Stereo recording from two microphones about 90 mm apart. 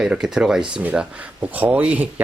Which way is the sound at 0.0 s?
5° right (ahead or behind).